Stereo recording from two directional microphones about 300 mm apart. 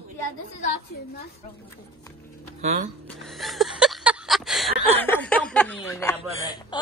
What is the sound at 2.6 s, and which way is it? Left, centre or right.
Speech, right.